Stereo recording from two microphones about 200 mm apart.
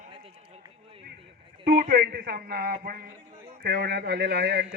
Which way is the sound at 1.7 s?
45° right (ahead or behind).